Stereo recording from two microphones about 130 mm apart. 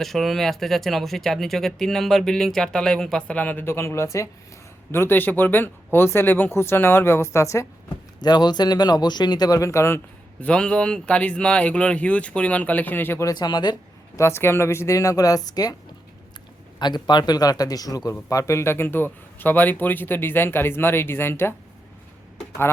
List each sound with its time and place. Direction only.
0.0 s a man's voice: centre (ahead or behind); by 7.7 s 20° left (ahead or behind)
8.2 s speech: 35° left (ahead or behind)
10.4 s a man's voice: 5° left (ahead or behind)
13.3 s speech: 35° left (ahead or behind)
14.2 s speech: 20° left (ahead or behind)
16.8 s a man's voice: 35° left (ahead or behind); by 21.5 s 15° left (ahead or behind)